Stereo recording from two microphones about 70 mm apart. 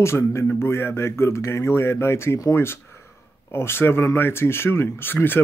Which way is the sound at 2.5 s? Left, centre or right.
Left.